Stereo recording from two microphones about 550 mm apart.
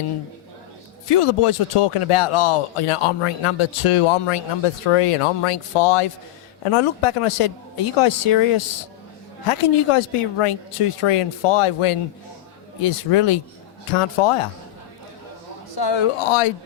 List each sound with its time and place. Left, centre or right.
1.0 s speech: left
15.7 s speech: left